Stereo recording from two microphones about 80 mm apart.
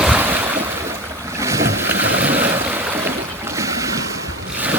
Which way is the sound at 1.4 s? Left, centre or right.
Right.